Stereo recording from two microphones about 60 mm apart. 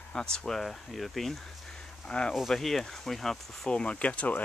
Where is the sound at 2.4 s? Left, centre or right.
Centre.